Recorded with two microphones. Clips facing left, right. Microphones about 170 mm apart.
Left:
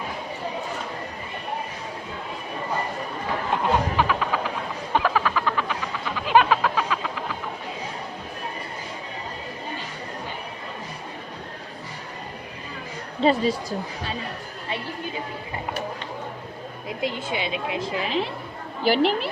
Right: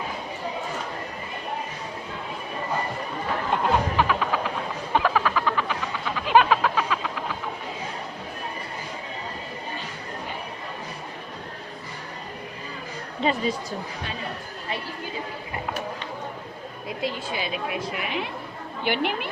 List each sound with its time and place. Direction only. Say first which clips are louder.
3.5 s a sound: even; centre (ahead or behind)
13.2 s a woman's voice: left 5 dB; 35° left (ahead or behind)
17.0 s a woman's voice: left 2 dB; 25° left (ahead or behind)